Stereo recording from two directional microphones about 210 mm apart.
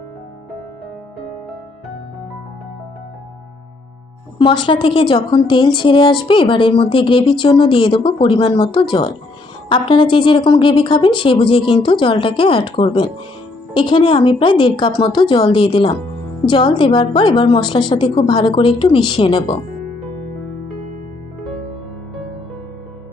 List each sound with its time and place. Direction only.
4.4 s a woman's voice: 20° left (ahead or behind)